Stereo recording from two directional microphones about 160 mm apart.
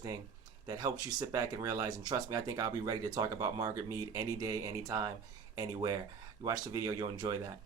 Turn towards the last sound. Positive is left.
turn(degrees=-25)  # may be behind; listen again after turning